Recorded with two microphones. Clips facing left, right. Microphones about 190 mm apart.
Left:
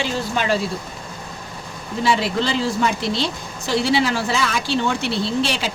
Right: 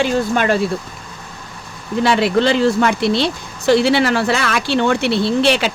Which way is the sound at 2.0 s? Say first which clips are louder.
Right 6 dB; 65° right (ahead or behind).